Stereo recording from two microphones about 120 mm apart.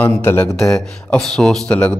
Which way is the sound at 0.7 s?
5° left (ahead or behind).